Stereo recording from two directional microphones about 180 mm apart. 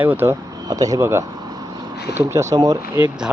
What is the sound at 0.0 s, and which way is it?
Speech, 10° right (ahead or behind).